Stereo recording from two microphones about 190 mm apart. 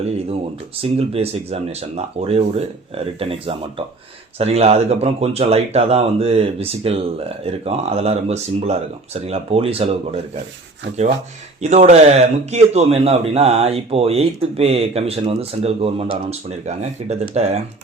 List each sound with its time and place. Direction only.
0.8 s a man's voice: 30° right (ahead or behind)
11.6 s a man's voice: 35° right (ahead or behind)